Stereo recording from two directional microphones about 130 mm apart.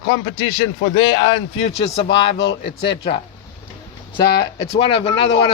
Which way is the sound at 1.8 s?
45° left (ahead or behind).